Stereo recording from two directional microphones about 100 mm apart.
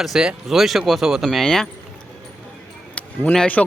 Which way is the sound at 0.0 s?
5° right (ahead or behind).